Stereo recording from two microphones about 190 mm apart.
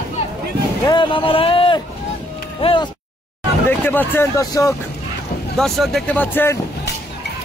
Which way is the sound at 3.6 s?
10° left (ahead or behind).